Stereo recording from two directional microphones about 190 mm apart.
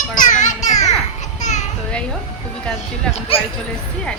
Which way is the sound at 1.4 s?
40° left (ahead or behind).